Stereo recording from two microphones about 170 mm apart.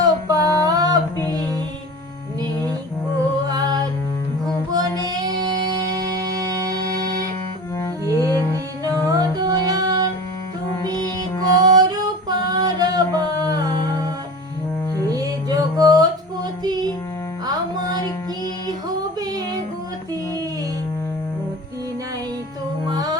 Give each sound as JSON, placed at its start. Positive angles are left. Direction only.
{"t": 0.0, "sound": "a sound", "side_deg": -20}
{"t": 3.5, "sound": "music", "side_deg": -20}
{"t": 4.7, "sound": "child singing", "side_deg": -25}
{"t": 8.0, "sound": "music", "side_deg": -20}
{"t": 11.5, "sound": "music", "side_deg": -25}
{"t": 15.0, "sound": "music", "side_deg": -20}
{"t": 22.9, "sound": "music", "side_deg": -20}